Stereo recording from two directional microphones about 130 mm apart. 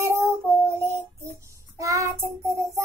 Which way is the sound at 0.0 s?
20° right (ahead or behind).